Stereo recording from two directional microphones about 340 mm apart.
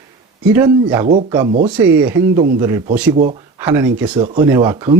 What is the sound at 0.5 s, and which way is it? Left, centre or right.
Speech, centre.